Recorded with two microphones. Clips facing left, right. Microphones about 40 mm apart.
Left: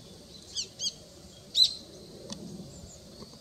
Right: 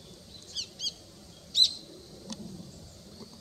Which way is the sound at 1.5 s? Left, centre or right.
Centre.